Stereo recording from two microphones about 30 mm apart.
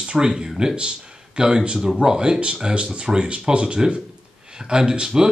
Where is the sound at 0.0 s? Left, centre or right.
Right.